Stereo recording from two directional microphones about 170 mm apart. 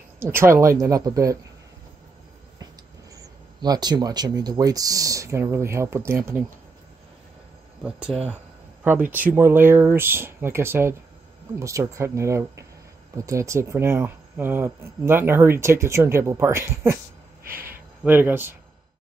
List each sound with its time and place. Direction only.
0.2 s speech: 15° right (ahead or behind)
3.2 s speech: 25° right (ahead or behind)
8.1 s speech: 5° left (ahead or behind)
8.8 s speech: 10° right (ahead or behind)
17.5 s a sound: 60° right (ahead or behind)
18.0 s speech: 10° right (ahead or behind)